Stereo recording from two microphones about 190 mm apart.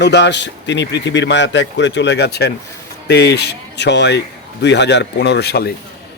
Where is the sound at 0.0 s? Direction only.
65° left (ahead or behind).